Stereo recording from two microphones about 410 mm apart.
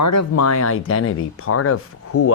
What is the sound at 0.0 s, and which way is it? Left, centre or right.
Speech, left.